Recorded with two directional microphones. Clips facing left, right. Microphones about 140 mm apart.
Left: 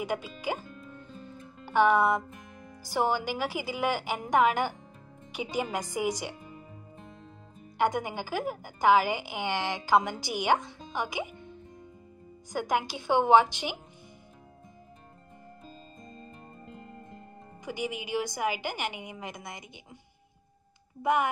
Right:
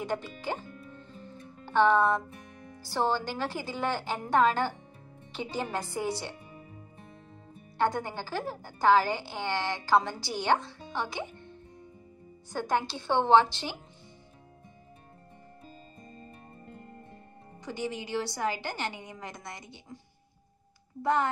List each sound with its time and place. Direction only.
0.0 s a woman's voice: 10° left (ahead or behind)
1.7 s a woman's voice: 10° left (ahead or behind)
7.7 s a woman's voice: 15° left (ahead or behind)
12.4 s a woman's voice: 15° left (ahead or behind)
17.6 s a woman's voice: 15° left (ahead or behind)
21.0 s a woman's voice: 15° left (ahead or behind)